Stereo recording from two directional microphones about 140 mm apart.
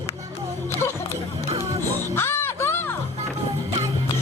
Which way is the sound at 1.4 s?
45° right (ahead or behind).